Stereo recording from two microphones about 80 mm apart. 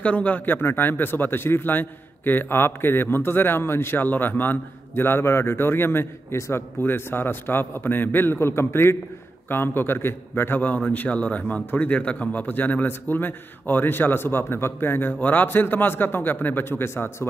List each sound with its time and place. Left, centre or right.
0.0 s a man's voice: centre